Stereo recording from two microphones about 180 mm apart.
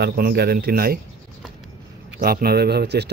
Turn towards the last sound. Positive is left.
turn(degrees=-70)  # may be behind; listen again after turning